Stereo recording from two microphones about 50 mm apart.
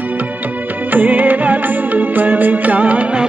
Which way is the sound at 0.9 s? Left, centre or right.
Right.